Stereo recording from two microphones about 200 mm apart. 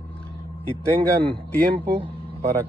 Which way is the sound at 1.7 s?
25° right (ahead or behind).